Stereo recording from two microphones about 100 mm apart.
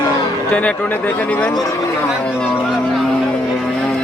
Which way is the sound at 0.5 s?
15° left (ahead or behind).